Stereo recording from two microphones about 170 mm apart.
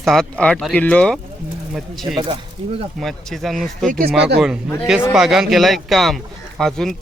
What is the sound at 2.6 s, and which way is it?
Speech, 35° right (ahead or behind).